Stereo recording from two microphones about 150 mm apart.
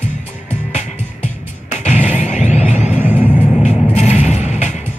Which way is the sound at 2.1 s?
50° left (ahead or behind).